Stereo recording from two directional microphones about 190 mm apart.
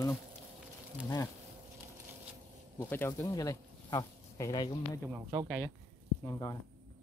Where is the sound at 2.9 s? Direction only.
15° left (ahead or behind).